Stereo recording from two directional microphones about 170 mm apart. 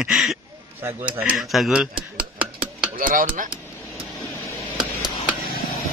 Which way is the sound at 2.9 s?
55° right (ahead or behind).